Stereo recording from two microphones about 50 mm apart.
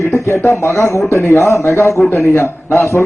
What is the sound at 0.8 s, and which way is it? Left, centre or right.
Speech, left.